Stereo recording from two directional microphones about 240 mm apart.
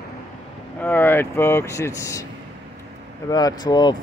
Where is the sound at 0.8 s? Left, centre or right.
Centre.